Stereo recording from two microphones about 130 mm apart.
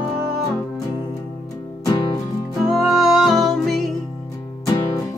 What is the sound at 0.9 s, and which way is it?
Music, 30° left (ahead or behind).